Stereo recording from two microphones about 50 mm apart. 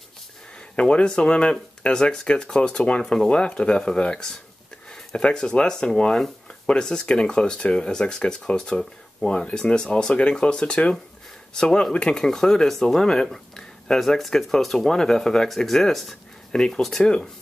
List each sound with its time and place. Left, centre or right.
0.7 s speech: left